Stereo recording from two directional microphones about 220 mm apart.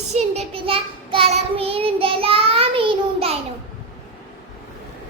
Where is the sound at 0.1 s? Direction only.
30° right (ahead or behind).